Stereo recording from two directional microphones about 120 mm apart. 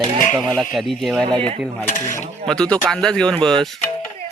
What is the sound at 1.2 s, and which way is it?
Speech, 40° right (ahead or behind).